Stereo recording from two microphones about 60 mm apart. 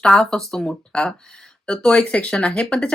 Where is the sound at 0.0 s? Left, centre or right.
Centre.